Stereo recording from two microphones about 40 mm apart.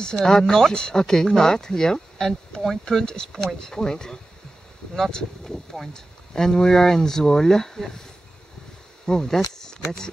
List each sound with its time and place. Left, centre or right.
0.0 s speech: centre
9.0 s speech: centre